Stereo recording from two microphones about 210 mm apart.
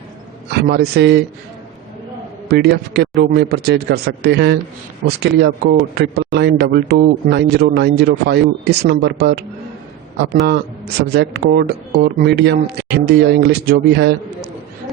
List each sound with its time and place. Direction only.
0.5 s a man's voice: 50° right (ahead or behind)
2.5 s a man's voice: 50° right (ahead or behind)
11.1 s a man's voice: 50° right (ahead or behind)